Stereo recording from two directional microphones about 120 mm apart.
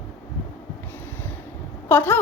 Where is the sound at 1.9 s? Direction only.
15° left (ahead or behind).